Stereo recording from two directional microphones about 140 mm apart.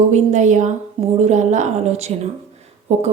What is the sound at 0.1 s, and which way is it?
A woman's voice, 55° right (ahead or behind).